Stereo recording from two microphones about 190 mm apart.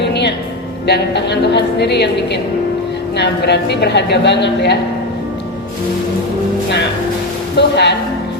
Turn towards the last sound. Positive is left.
turn(degrees=60)  # may be behind; listen again after turning